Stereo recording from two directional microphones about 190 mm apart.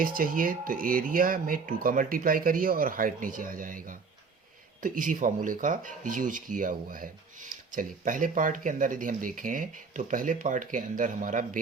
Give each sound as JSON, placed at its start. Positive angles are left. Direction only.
{"t": 0.0, "sound": "speech", "side_deg": -45}